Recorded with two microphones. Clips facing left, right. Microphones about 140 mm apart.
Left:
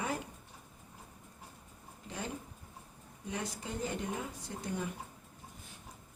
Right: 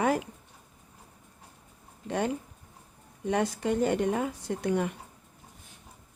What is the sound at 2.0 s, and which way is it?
Speech, 65° right (ahead or behind).